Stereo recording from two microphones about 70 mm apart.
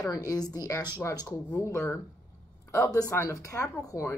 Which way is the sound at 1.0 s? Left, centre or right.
Left.